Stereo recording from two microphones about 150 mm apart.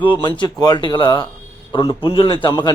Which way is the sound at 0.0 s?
35° left (ahead or behind).